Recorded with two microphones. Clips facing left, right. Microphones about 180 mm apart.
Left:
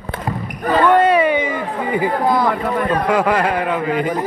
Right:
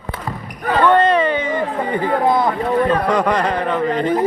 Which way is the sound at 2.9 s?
5° left (ahead or behind).